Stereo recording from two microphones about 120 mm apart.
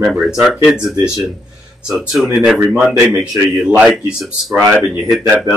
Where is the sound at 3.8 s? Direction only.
5° right (ahead or behind).